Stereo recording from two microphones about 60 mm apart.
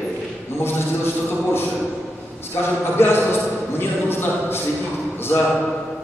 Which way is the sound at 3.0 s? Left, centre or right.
Left.